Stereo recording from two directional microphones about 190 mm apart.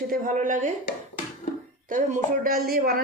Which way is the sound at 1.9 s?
40° right (ahead or behind).